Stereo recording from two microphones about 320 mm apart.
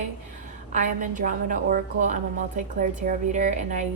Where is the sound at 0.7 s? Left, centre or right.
Right.